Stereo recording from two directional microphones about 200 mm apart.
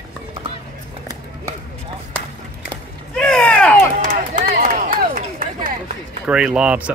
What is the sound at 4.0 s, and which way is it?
Run, 40° right (ahead or behind).